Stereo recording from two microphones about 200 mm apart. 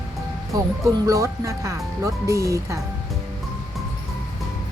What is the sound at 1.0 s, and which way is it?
Speech, 15° right (ahead or behind).